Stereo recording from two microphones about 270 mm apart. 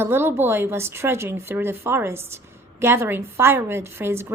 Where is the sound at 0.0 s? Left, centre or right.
Centre.